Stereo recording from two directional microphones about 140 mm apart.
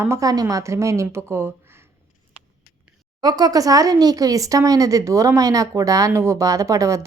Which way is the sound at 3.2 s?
30° right (ahead or behind).